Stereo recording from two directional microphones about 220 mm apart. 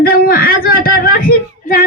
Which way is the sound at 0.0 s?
40° left (ahead or behind).